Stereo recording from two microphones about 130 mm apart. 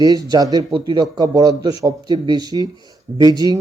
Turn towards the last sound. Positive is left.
turn(degrees=-30)  # may be behind; listen again after turning